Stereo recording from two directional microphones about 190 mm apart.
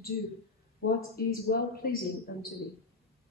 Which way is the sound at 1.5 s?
50° left (ahead or behind).